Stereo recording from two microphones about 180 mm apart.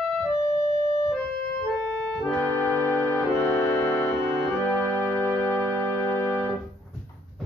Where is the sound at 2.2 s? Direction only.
5° left (ahead or behind).